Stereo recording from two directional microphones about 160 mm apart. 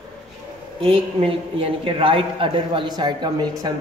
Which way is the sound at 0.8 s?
35° right (ahead or behind).